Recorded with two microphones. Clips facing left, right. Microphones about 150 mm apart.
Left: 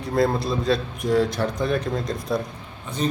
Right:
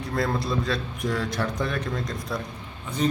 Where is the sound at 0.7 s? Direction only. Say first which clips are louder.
Left 6 dB; 30° left (ahead or behind).